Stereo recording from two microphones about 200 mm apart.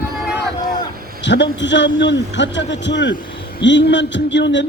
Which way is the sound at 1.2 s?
60° left (ahead or behind).